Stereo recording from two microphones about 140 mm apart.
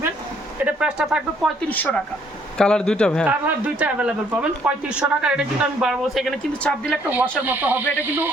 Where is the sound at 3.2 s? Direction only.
10° right (ahead or behind); by 7.0 s 10° left (ahead or behind).